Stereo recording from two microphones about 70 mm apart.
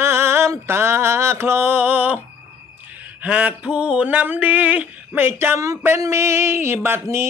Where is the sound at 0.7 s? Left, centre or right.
Right.